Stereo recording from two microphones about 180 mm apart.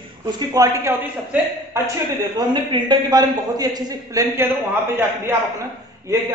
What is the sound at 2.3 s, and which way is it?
A man's voice, 25° right (ahead or behind).